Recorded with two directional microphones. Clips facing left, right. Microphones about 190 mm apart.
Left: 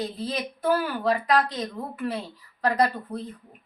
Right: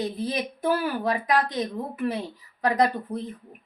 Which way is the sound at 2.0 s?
15° right (ahead or behind).